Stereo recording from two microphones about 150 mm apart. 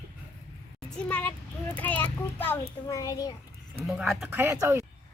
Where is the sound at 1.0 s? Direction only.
10° left (ahead or behind).